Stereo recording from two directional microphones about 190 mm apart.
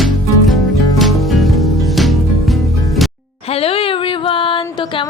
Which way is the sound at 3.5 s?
30° left (ahead or behind).